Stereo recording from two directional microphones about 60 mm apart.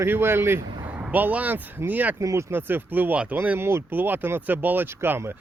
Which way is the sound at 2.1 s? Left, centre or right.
Right.